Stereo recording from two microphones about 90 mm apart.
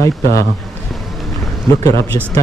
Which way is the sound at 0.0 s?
35° left (ahead or behind).